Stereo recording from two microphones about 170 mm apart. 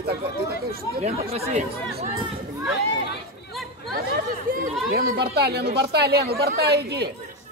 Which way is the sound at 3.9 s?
60° right (ahead or behind).